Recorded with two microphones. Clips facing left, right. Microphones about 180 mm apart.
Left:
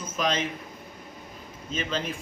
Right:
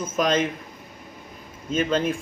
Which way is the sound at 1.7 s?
50° right (ahead or behind).